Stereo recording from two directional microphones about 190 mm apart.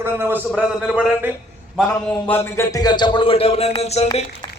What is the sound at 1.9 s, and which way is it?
A man's voice, 15° left (ahead or behind).